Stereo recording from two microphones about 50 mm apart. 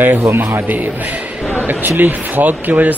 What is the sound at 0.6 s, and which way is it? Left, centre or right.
Speech, right.